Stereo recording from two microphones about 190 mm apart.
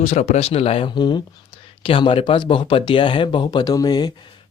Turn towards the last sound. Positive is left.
turn(degrees=20)  # may be behind; listen again after turning